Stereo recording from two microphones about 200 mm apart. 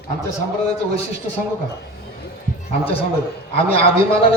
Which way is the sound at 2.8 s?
30° left (ahead or behind).